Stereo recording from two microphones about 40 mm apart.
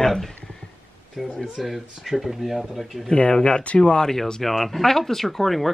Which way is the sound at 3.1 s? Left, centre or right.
Left.